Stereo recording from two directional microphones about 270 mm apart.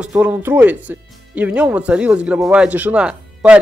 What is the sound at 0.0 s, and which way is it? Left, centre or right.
Speech, centre.